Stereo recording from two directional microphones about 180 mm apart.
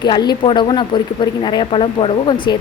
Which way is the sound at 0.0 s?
25° left (ahead or behind).